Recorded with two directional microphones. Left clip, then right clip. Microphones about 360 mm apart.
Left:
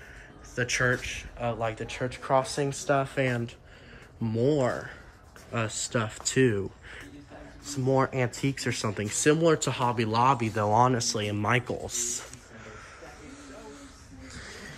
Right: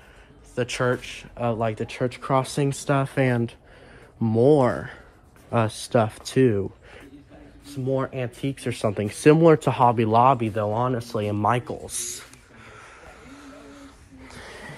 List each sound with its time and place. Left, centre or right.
0.6 s speech: centre
14.2 s wheeze: centre